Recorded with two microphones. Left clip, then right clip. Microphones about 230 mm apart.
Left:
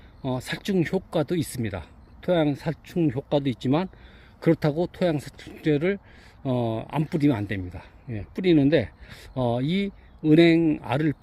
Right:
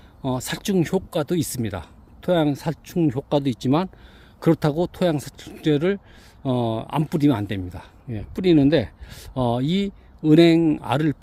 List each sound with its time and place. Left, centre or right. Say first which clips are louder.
0.2 s speech: right 3 dB; centre